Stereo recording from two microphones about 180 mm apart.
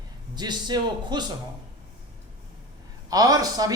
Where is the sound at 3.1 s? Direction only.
20° right (ahead or behind).